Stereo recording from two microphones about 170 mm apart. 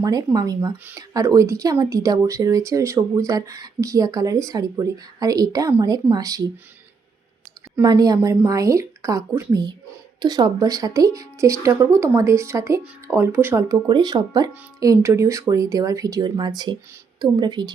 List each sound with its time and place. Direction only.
0.0 s speech: 20° right (ahead or behind)
7.8 s speech: 20° right (ahead or behind)